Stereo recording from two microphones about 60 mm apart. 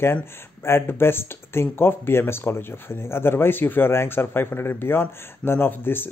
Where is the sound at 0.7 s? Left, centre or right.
Left.